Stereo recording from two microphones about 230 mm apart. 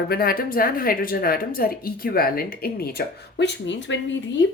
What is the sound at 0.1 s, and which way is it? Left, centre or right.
Speech, left.